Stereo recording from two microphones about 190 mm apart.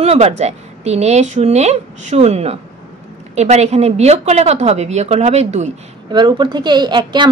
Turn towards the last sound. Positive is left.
turn(degrees=-25)  # may be behind; listen again after turning